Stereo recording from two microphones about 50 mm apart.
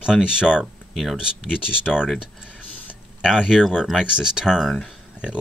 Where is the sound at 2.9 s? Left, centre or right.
Centre.